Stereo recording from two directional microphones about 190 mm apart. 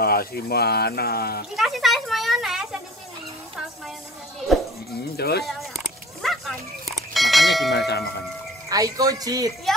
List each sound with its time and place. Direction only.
0.0 s speech: 55° left (ahead or behind)
1.6 s speech: centre (ahead or behind)
5.1 s speech: 55° left (ahead or behind)
7.0 s bell: centre (ahead or behind)
7.7 s speech: 60° left (ahead or behind)
8.6 s speech: 20° right (ahead or behind)